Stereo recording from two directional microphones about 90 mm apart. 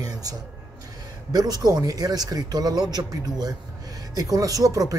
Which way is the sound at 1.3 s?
50° right (ahead or behind).